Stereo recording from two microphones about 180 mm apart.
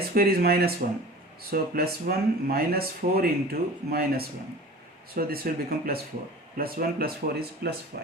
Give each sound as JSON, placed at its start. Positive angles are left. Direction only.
{"t": 0.1, "sound": "speech", "side_deg": -60}